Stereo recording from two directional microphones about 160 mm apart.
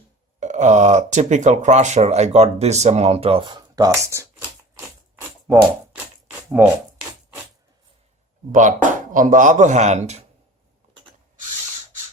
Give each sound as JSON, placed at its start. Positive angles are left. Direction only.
{"t": 0.3, "sound": "speech", "side_deg": -50}
{"t": 6.6, "sound": "speech", "side_deg": -10}
{"t": 8.5, "sound": "speech", "side_deg": -50}